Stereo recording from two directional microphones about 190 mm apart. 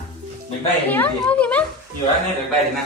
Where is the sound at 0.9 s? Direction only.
10° left (ahead or behind).